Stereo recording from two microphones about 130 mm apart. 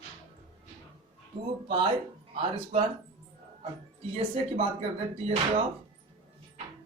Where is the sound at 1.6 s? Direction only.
40° right (ahead or behind).